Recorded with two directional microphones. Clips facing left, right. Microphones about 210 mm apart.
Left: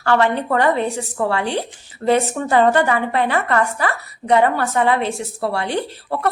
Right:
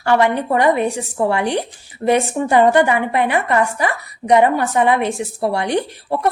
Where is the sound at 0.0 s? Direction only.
15° right (ahead or behind).